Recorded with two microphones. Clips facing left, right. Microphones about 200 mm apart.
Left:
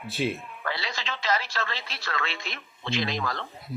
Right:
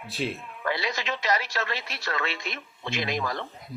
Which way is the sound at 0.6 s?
20° right (ahead or behind).